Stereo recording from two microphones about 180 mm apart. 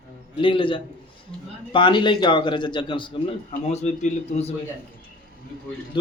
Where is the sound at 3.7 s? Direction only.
40° left (ahead or behind).